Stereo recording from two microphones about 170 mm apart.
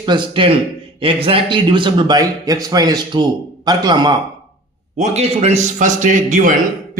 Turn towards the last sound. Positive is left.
turn(degrees=-50)  # may be behind; listen again after turning